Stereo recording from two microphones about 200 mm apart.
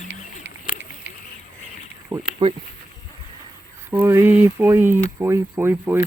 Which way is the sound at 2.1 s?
30° right (ahead or behind).